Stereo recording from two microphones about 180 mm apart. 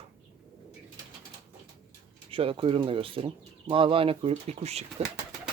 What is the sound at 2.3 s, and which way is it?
Speech, 30° right (ahead or behind).